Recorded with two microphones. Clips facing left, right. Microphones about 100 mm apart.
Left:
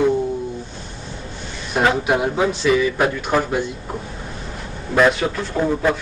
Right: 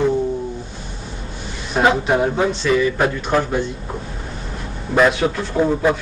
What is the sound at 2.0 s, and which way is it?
Speech, 5° left (ahead or behind).